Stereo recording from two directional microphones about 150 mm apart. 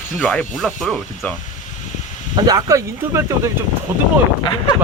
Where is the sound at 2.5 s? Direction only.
25° right (ahead or behind).